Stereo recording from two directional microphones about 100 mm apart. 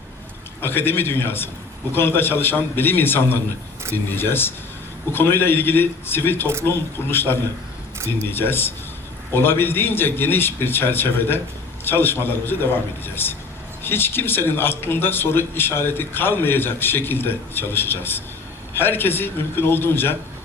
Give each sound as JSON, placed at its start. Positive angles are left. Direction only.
{"t": 0.6, "sound": "a man's voice", "side_deg": 20}